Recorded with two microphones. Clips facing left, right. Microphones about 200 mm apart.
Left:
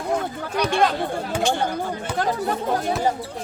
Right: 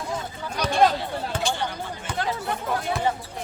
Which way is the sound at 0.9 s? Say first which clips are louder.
Left 4 dB; 50° left (ahead or behind).